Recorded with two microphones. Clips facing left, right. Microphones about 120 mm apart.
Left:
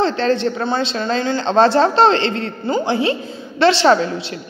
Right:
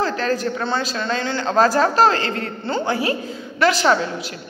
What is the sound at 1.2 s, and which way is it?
A woman's voice, 25° left (ahead or behind).